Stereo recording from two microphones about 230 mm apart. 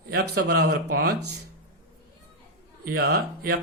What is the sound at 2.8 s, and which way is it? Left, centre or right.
Speech, right.